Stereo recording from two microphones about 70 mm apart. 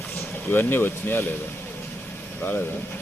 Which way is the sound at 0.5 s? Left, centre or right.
Left.